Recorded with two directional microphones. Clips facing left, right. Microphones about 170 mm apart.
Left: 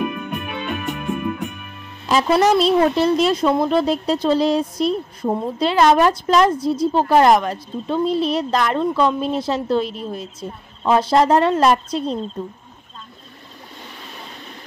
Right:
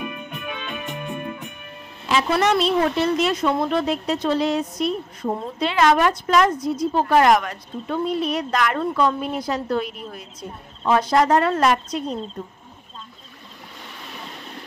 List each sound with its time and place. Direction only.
0.2 s music: 70° left (ahead or behind)
0.6 s music: 50° left (ahead or behind)
0.9 s music: 85° left
2.4 s a woman's voice: 35° left (ahead or behind)